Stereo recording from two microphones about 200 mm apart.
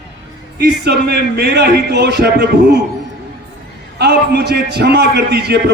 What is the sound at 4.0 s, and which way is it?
Speech, 55° right (ahead or behind).